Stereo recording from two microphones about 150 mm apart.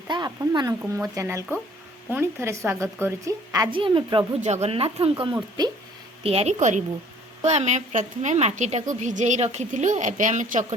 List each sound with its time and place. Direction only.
0.1 s a woman's voice: 30° right (ahead or behind)
3.7 s speech: 35° right (ahead or behind)
4.4 s speech: 45° right (ahead or behind); by 5.7 s 25° right (ahead or behind)
6.2 s a woman's voice: 45° right (ahead or behind)